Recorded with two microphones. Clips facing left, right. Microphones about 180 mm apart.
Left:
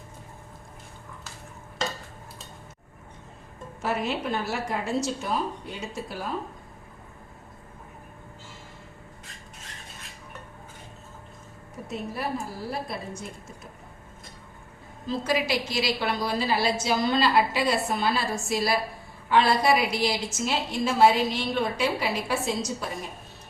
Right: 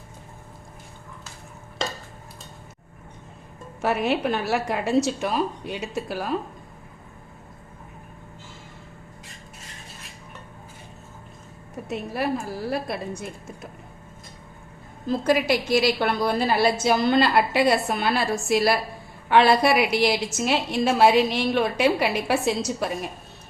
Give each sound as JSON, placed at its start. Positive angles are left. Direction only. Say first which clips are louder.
{"t": 3.8, "sound": "a woman's voice", "louder": "right 5 dB", "side_deg": -65}
{"t": 11.9, "sound": "a woman's voice", "louder": "right 5 dB", "side_deg": -75}
{"t": 15.0, "sound": "a woman's voice", "louder": "right 5 dB", "side_deg": -50}